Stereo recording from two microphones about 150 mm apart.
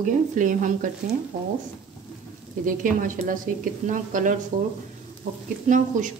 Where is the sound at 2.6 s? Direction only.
65° right (ahead or behind).